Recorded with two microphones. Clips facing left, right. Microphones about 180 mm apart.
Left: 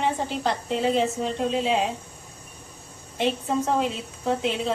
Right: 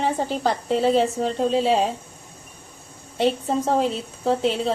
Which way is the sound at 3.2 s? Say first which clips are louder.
Right 3 dB; 35° right (ahead or behind).